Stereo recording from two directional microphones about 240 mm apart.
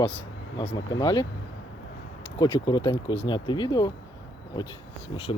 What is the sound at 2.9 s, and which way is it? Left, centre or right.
Speech, left.